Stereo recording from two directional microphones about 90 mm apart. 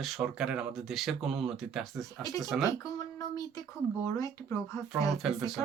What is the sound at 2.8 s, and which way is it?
Speech, 40° left (ahead or behind).